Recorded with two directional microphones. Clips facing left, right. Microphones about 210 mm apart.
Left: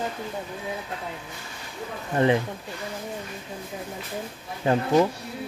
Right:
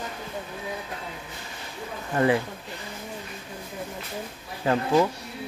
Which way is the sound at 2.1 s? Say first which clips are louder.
Left 1 dB; 25° left (ahead or behind).